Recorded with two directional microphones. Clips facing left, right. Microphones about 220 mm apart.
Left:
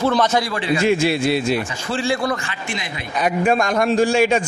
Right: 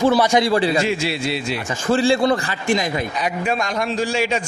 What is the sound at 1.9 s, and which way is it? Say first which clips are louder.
Speech: right 6 dB; 35° right (ahead or behind).